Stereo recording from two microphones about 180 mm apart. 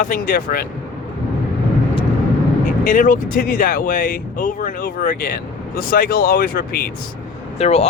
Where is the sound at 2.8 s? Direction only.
45° left (ahead or behind).